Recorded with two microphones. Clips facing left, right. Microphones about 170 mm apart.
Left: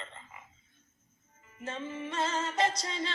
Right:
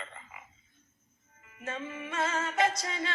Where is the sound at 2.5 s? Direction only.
10° right (ahead or behind).